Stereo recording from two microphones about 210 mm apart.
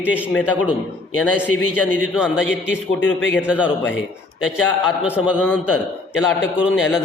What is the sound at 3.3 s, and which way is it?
Speech, 5° right (ahead or behind).